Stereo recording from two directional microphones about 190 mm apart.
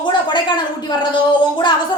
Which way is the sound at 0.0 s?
25° left (ahead or behind).